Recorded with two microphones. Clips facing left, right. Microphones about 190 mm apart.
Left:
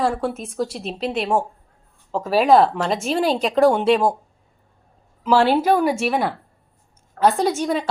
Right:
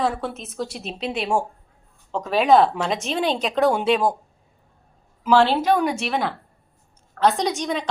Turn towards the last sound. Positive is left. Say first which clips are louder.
# left 4 dB
turn(degrees=5)  # may be behind; listen again after turning